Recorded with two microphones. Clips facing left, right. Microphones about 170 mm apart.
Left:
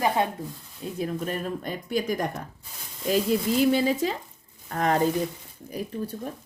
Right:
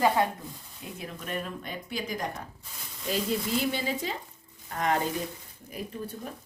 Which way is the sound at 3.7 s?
40° left (ahead or behind).